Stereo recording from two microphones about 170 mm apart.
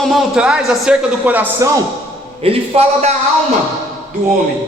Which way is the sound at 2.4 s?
35° right (ahead or behind).